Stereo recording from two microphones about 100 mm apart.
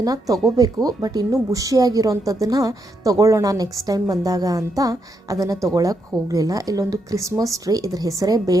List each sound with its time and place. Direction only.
0.0 s a woman's voice: 40° right (ahead or behind)